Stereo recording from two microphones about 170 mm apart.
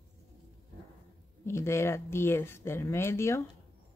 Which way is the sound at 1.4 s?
15° left (ahead or behind).